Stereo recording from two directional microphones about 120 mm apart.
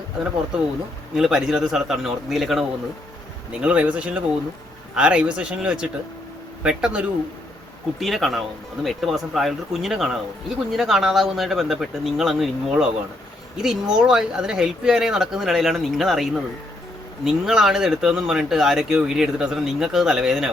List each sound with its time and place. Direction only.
1.1 s speech: 5° right (ahead or behind)